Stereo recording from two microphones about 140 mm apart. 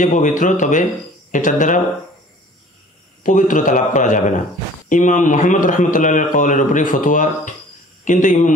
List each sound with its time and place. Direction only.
0.0 s a man's voice: 65° left (ahead or behind)
3.3 s a man's voice: 65° left (ahead or behind)